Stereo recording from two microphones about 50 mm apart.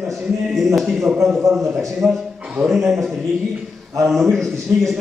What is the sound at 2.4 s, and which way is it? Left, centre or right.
Speech, centre.